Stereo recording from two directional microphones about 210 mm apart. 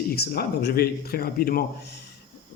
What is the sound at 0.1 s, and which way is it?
A man's voice, 50° left (ahead or behind).